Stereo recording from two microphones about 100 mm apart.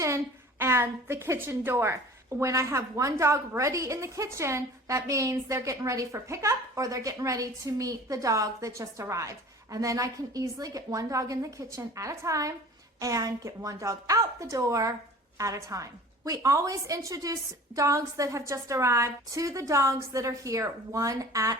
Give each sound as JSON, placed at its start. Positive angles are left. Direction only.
{"t": 0.6, "sound": "a woman's voice", "side_deg": -25}